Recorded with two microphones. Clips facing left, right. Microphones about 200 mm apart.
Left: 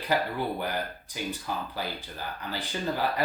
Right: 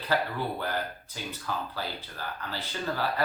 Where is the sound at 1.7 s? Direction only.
15° left (ahead or behind).